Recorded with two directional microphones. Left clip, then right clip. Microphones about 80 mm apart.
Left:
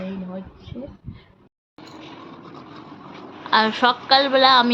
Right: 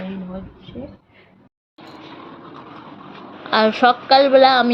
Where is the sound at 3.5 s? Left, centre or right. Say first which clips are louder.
Right 3 dB; right.